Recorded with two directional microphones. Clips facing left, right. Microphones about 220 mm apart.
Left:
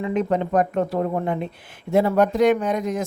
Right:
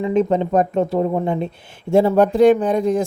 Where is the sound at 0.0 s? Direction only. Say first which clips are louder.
Right 5 dB; 25° right (ahead or behind).